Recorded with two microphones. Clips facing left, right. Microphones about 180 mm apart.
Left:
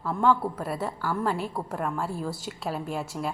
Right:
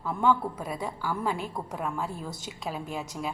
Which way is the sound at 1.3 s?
5° left (ahead or behind).